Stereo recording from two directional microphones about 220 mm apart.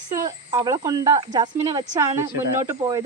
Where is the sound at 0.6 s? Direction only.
15° right (ahead or behind).